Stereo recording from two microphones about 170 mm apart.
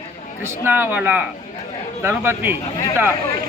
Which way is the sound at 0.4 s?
10° right (ahead or behind).